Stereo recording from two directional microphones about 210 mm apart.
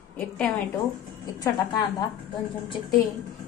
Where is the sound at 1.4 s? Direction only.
20° left (ahead or behind).